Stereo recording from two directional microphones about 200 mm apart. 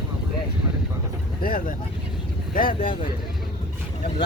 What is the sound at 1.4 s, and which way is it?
Speech, 45° left (ahead or behind).